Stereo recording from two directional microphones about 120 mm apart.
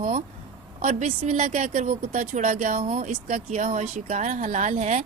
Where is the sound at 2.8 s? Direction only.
65° right (ahead or behind); by 5.0 s 80° right.